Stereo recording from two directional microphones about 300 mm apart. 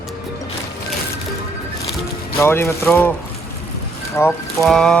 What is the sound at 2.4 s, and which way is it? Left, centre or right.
Speech, centre.